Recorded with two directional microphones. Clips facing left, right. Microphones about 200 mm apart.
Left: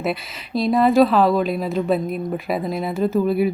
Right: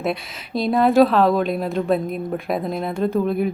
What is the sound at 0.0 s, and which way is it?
A woman's voice, centre (ahead or behind).